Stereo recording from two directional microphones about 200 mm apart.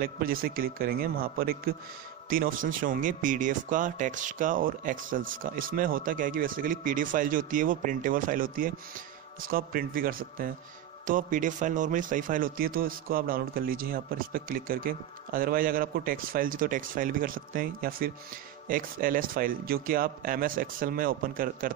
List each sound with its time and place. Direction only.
0.0 s speech: 45° right (ahead or behind)